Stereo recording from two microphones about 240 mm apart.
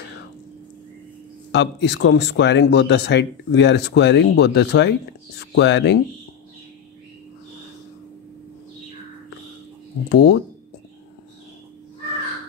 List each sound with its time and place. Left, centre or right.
1.5 s speech: left
10.0 s speech: left